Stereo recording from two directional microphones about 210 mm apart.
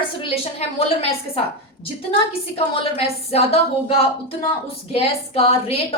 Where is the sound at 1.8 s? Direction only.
25° left (ahead or behind).